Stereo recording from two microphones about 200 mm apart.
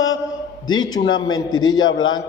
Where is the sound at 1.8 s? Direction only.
80° left.